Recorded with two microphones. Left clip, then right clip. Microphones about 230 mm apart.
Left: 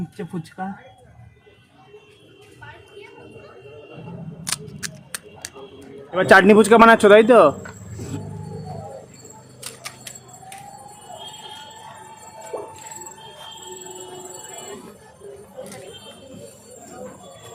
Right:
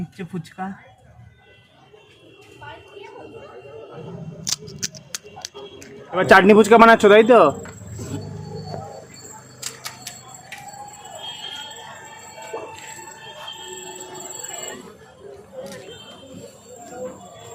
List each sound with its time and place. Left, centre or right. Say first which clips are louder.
4.4 s scissors: right 2 dB; centre
5.4 s a sound: right 2 dB; centre
6.1 s a man's voice: even; centre
12.5 s jingle bell: left 1 dB; left